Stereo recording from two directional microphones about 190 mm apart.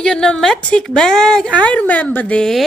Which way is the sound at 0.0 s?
5° left (ahead or behind).